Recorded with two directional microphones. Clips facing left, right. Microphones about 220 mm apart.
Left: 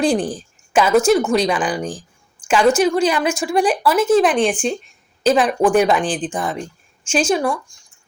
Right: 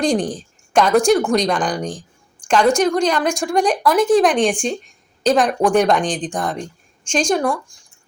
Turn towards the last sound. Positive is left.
turn(degrees=0)  # may be behind; listen again after turning